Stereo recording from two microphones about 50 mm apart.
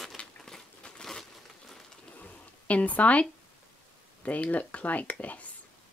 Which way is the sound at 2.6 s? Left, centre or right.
Left.